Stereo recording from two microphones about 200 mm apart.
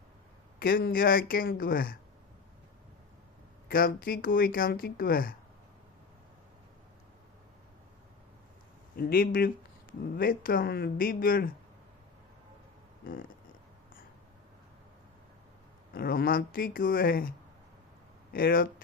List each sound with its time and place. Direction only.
0.6 s speech: 45° left (ahead or behind)
3.7 s speech: 45° left (ahead or behind)
9.0 s speech: 45° left (ahead or behind)
13.0 s speech: 45° left (ahead or behind)
15.9 s speech: 45° left (ahead or behind)
18.3 s speech: 45° left (ahead or behind)